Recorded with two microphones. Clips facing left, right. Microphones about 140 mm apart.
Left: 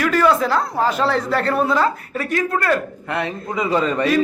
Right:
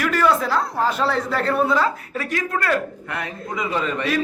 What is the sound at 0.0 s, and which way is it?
A man's voice, centre (ahead or behind).